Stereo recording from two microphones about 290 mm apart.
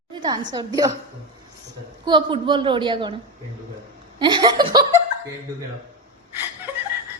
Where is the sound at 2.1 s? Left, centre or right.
Centre.